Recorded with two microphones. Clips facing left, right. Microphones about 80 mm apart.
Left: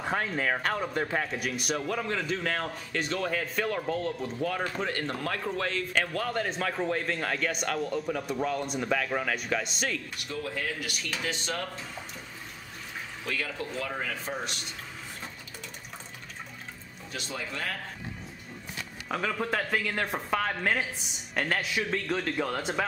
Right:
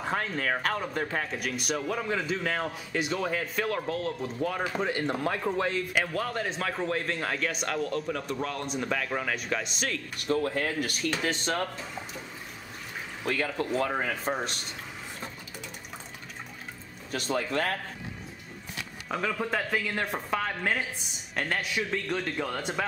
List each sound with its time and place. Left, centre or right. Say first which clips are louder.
0.0 s speech: left 1 dB; centre
6.1 s speech: even; centre
10.1 s speech: right 7 dB; right
13.3 s speech: right 5 dB; right
17.1 s speech: right 8 dB; right
19.0 s speech: even; centre